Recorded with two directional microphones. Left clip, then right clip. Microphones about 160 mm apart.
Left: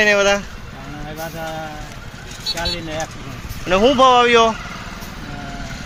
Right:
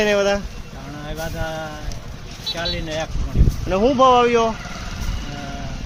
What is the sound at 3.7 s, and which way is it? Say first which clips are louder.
Speech: left 2 dB; 5° right (ahead or behind).